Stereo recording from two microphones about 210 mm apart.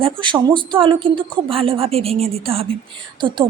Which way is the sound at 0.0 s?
20° right (ahead or behind).